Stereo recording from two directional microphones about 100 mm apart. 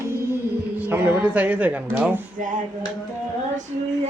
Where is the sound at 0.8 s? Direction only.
20° right (ahead or behind).